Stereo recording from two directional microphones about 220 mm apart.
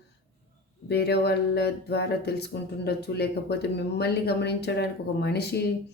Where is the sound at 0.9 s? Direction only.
45° left (ahead or behind).